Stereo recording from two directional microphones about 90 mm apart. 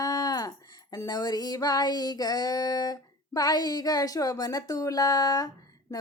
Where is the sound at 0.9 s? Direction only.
50° left (ahead or behind).